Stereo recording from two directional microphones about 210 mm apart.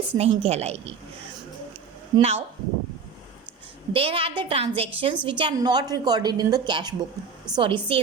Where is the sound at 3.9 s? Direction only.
25° right (ahead or behind).